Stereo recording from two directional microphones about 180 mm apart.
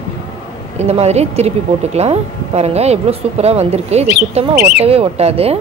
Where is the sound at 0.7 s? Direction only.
35° right (ahead or behind).